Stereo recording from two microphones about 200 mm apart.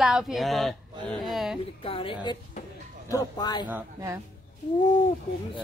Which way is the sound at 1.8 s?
25° left (ahead or behind).